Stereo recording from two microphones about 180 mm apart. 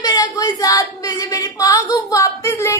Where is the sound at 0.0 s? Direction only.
20° left (ahead or behind).